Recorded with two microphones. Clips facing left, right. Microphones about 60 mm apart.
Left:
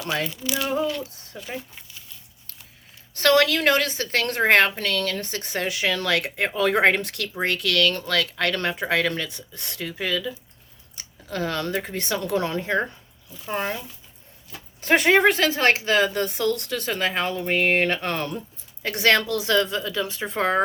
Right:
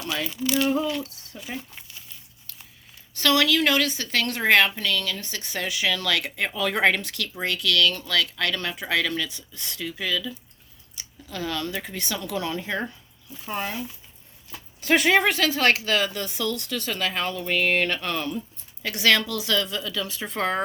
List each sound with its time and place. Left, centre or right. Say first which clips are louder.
0.4 s speech: right 4 dB; centre
3.2 s a woman's voice: left 3 dB; left
14.8 s a woman's voice: left 2 dB; left
18.1 s a woman's voice: left 1 dB; left